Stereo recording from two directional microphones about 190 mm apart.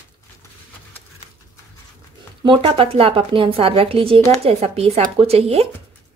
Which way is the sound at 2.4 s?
25° right (ahead or behind).